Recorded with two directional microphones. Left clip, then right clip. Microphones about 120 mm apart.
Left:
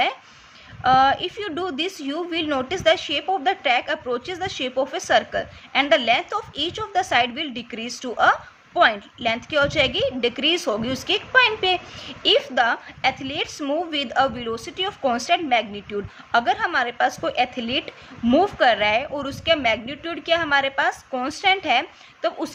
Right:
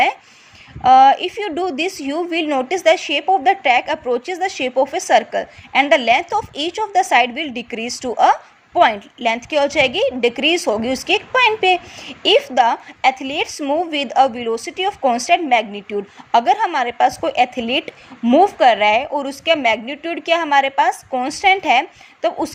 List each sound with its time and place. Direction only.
0.8 s a woman's voice: 40° right (ahead or behind)